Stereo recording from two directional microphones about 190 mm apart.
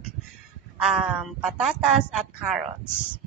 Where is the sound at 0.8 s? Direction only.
5° right (ahead or behind).